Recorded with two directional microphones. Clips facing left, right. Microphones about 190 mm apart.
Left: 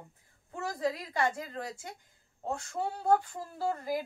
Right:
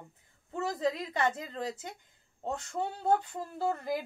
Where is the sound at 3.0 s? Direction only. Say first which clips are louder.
Left 2 dB; 20° right (ahead or behind).